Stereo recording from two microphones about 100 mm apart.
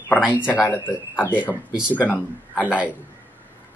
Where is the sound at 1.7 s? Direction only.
10° right (ahead or behind).